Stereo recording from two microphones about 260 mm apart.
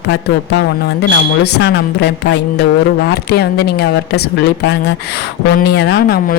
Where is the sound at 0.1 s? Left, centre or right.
Left.